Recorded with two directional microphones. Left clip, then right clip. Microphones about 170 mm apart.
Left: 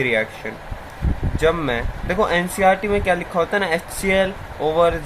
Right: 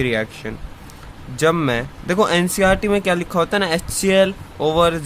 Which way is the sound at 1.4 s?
50° right (ahead or behind).